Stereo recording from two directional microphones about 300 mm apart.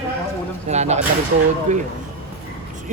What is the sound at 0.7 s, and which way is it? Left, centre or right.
Speech, right.